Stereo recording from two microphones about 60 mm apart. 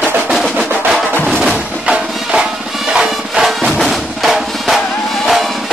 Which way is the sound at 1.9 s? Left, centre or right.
Centre.